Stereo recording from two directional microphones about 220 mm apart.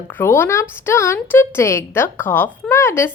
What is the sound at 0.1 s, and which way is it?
A woman's voice, 10° left (ahead or behind).